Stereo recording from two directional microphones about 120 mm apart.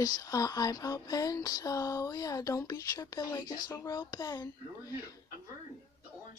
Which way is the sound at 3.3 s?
30° left (ahead or behind).